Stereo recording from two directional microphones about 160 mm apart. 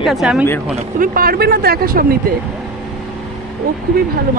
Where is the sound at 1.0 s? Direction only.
65° right (ahead or behind).